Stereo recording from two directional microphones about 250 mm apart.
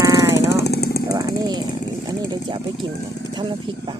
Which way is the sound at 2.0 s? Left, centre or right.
Centre.